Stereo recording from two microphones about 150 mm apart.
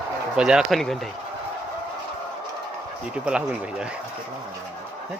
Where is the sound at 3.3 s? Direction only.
5° right (ahead or behind).